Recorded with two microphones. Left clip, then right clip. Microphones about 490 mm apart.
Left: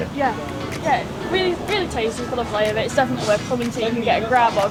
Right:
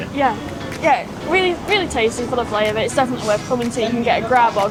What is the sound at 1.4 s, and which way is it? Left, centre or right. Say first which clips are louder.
Speech: right 3 dB; centre.